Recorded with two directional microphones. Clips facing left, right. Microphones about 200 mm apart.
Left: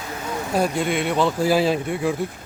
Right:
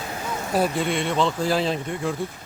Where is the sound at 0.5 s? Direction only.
Centre (ahead or behind).